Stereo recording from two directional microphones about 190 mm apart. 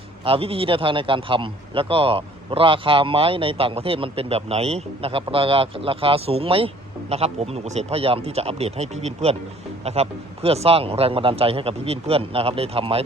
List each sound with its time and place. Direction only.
0.3 s a man's voice: 30° right (ahead or behind)